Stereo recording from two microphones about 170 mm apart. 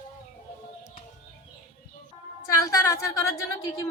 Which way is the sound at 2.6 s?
15° left (ahead or behind).